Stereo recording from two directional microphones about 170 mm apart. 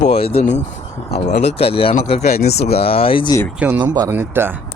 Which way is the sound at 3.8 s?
20° right (ahead or behind).